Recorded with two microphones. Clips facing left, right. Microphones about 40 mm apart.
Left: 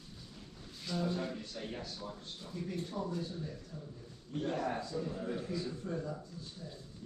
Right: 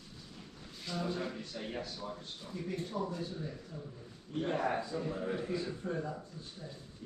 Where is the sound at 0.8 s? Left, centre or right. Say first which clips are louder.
Left 1 dB; centre.